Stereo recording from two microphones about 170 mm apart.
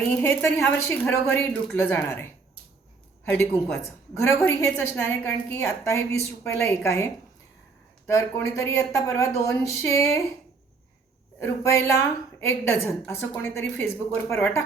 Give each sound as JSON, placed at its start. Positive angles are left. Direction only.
{"t": 0.2, "sound": "a woman's voice", "side_deg": 15}
{"t": 3.2, "sound": "a woman's voice", "side_deg": 15}
{"t": 11.3, "sound": "a woman's voice", "side_deg": 15}